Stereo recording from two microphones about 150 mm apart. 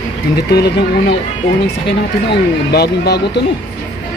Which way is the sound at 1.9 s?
90° left.